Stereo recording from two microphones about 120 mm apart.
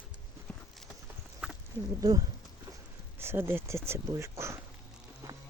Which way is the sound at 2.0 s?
30° right (ahead or behind).